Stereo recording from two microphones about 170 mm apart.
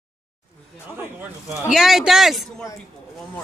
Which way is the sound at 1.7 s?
Centre (ahead or behind).